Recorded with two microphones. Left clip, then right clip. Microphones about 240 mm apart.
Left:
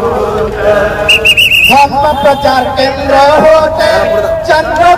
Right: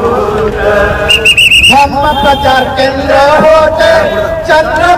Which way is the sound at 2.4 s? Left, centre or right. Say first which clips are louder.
Right 1 dB; centre.